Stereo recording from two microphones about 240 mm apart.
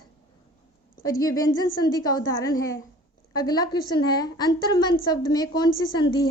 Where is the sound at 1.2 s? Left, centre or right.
Centre.